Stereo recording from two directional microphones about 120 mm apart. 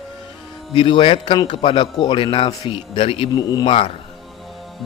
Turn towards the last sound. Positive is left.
turn(degrees=40)  # may be behind; listen again after turning